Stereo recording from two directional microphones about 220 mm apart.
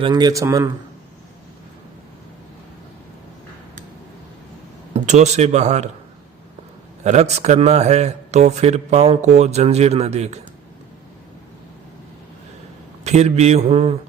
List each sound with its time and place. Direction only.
0.0 s speech: 20° right (ahead or behind)
4.9 s a man's voice: 30° right (ahead or behind)
7.0 s a man's voice: 30° right (ahead or behind)
13.1 s a man's voice: 30° right (ahead or behind)